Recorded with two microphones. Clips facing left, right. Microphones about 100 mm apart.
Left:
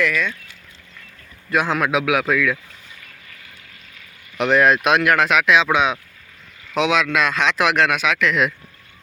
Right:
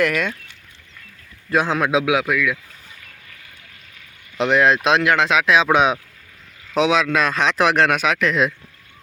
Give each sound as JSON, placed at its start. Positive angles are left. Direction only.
{"t": 0.0, "sound": "speech", "side_deg": -50}
{"t": 1.5, "sound": "speech", "side_deg": -30}
{"t": 2.2, "sound": "speech", "side_deg": -10}
{"t": 4.4, "sound": "speech", "side_deg": -20}
{"t": 5.6, "sound": "speech", "side_deg": -15}
{"t": 6.7, "sound": "speech", "side_deg": -35}